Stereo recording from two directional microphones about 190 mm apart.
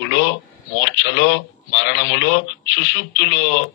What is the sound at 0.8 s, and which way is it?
A man's voice, 70° left (ahead or behind).